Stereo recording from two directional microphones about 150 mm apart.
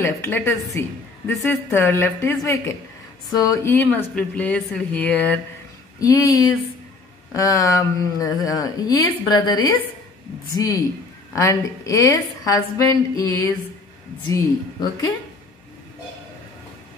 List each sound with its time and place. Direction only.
0.0 s a woman's voice: 15° left (ahead or behind)
5.9 s speech: 25° left (ahead or behind)